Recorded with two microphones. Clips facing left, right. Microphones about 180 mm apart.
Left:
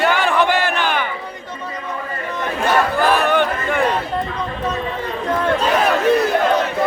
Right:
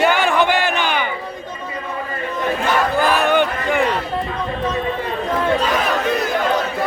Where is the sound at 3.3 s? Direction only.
Centre (ahead or behind).